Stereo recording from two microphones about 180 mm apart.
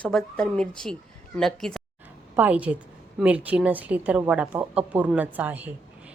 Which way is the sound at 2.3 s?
10° right (ahead or behind).